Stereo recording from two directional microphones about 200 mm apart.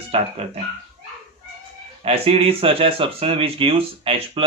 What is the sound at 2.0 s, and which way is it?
Speech, 30° right (ahead or behind).